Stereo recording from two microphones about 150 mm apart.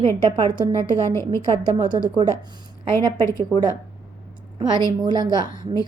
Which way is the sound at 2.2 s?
35° right (ahead or behind).